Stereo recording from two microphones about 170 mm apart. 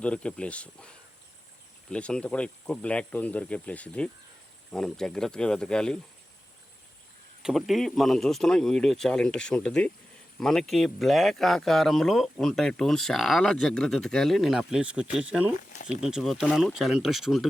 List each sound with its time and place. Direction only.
0.0 s speech: 5° left (ahead or behind)
7.4 s speech: centre (ahead or behind)
15.5 s a sound: 50° left (ahead or behind)
15.9 s speech: 5° right (ahead or behind)